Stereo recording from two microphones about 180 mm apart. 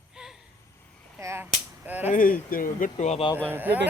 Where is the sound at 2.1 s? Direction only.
50° left (ahead or behind).